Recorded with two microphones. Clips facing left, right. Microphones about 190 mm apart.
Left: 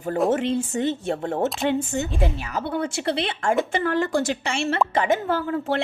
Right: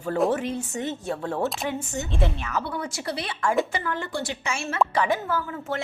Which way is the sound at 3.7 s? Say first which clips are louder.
Left 7 dB; 70° left (ahead or behind).